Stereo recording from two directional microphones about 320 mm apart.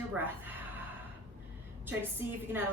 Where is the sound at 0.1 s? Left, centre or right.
Centre.